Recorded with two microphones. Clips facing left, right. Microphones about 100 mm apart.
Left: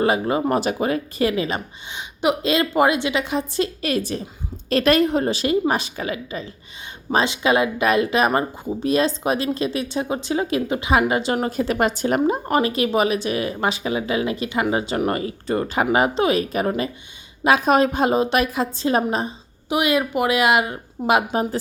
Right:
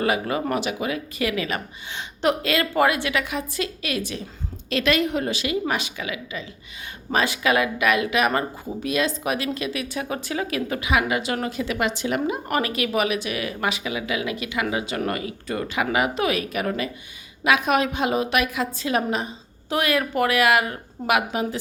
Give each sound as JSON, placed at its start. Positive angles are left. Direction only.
{"t": 0.0, "sound": "a woman's voice", "side_deg": 30}
{"t": 0.6, "sound": "a woman's voice", "side_deg": 40}
{"t": 7.1, "sound": "a woman's voice", "side_deg": 25}
{"t": 12.5, "sound": "speech", "side_deg": 30}
{"t": 19.6, "sound": "a woman's voice", "side_deg": 15}